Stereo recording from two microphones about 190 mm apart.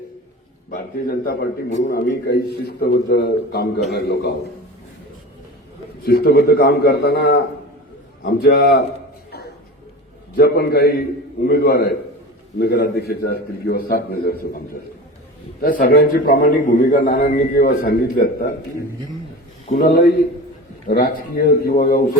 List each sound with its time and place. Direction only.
0.7 s a man's voice: 50° left (ahead or behind)
6.1 s a man's voice: 55° left (ahead or behind)
10.3 s a man's voice: 55° left (ahead or behind)
15.6 s a man's voice: 50° left (ahead or behind)
20.8 s a man's voice: 50° left (ahead or behind)